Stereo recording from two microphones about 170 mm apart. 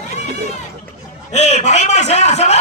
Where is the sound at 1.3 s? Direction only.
40° left (ahead or behind).